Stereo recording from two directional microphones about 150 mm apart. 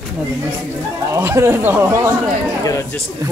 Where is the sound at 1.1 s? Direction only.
20° right (ahead or behind).